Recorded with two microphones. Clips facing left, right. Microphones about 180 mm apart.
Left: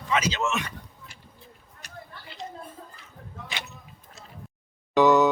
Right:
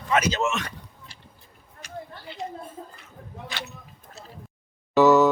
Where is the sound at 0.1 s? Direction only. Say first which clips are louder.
Right 3 dB; 45° right (ahead or behind).